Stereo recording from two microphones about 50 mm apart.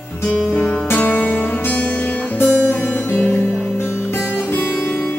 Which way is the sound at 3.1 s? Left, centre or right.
Left.